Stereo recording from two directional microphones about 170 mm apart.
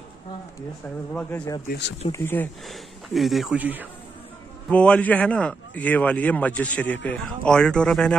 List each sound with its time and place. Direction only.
1.1 s speech: 10° left (ahead or behind)
1.7 s speech: 90° left
2.1 s speech: 10° left (ahead or behind)
2.7 s speech: centre (ahead or behind)
4.6 s speech: 5° left (ahead or behind)